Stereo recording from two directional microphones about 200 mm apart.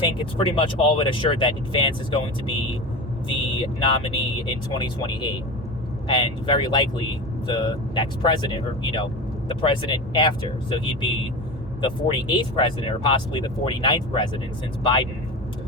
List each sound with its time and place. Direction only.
0.3 s speech: 25° left (ahead or behind)
3.2 s speech: 25° left (ahead or behind)